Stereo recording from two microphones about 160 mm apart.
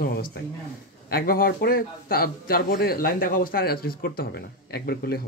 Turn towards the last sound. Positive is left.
turn(degrees=75)  # may be behind; listen again after turning